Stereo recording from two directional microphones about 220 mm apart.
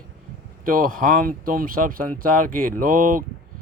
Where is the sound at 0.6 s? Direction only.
40° right (ahead or behind).